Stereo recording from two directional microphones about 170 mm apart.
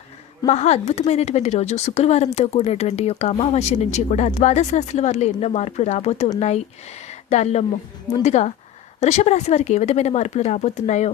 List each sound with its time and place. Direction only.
0.4 s speech: 40° left (ahead or behind)